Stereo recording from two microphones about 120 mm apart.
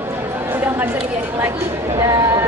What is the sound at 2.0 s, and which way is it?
Speech, 25° right (ahead or behind).